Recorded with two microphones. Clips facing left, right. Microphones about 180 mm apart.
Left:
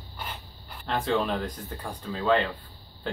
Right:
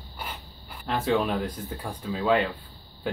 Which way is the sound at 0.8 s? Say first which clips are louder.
Right 2 dB; 5° right (ahead or behind).